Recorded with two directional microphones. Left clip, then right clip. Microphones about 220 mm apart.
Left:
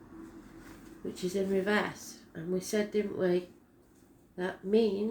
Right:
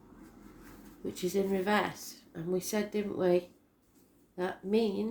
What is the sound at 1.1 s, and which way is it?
Speech, 45° right (ahead or behind).